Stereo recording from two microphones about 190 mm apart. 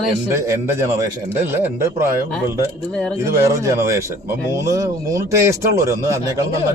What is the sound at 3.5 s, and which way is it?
A man's voice, 15° right (ahead or behind).